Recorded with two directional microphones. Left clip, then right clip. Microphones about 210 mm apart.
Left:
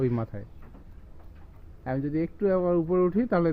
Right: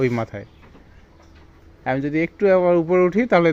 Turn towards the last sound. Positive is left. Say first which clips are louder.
# right 8 dB
turn(degrees=-25)  # may be behind; listen again after turning